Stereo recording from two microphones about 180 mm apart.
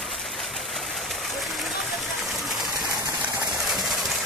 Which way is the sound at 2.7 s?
15° right (ahead or behind).